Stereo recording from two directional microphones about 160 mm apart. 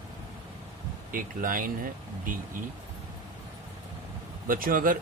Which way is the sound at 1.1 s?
60° right (ahead or behind).